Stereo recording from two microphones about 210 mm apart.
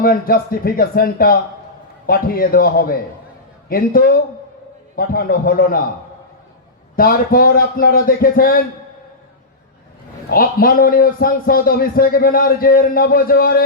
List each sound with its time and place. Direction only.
0.0 s a man's voice: 45° left (ahead or behind)
6.9 s a man's voice: 45° left (ahead or behind)
10.2 s a man's voice: 45° left (ahead or behind)